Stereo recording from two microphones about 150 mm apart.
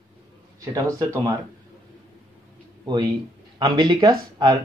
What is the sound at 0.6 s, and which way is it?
Speech, 25° right (ahead or behind).